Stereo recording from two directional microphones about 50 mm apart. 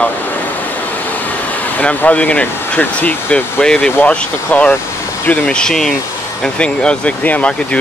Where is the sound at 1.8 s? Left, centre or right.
Left.